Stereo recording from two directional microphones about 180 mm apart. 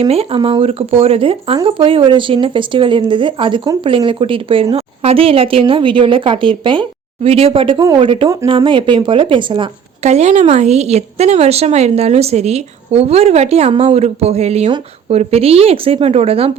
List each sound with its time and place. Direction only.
0.0 s a woman's voice: 35° right (ahead or behind)